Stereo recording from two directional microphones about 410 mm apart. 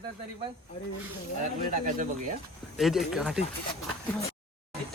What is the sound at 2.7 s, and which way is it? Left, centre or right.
Speech, centre.